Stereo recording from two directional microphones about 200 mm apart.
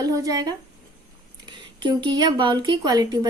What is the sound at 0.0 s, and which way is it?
Speech, 15° right (ahead or behind).